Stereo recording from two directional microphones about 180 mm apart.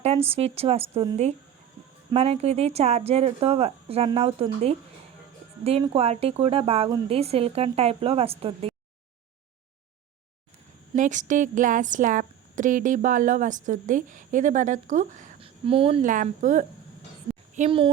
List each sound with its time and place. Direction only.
0.3 s speech: 35° right (ahead or behind)
10.9 s speech: 45° right (ahead or behind)
15.4 s a sound: 30° right (ahead or behind)
16.0 s speech: 45° right (ahead or behind)
17.7 s speech: 30° right (ahead or behind)